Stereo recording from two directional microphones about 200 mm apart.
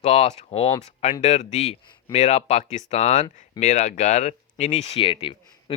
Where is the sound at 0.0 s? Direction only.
30° left (ahead or behind).